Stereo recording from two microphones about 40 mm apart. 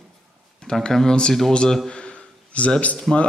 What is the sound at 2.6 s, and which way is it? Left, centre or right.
Speech, left.